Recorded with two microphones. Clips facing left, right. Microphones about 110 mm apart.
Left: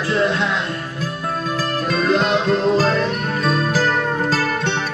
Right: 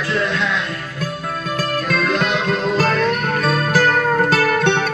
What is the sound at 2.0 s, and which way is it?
Music, 30° left (ahead or behind).